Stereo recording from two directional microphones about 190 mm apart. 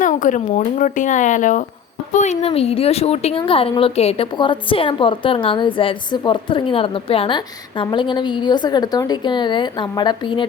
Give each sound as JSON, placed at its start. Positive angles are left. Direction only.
{"t": 0.0, "sound": "a woman's voice", "side_deg": 45}